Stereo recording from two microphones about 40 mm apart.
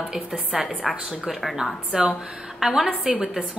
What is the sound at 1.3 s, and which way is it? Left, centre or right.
Speech, centre.